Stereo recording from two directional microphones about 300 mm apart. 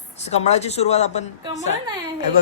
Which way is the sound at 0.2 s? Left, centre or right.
Left.